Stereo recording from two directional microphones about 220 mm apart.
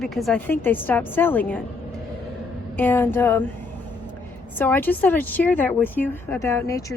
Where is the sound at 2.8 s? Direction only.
10° left (ahead or behind).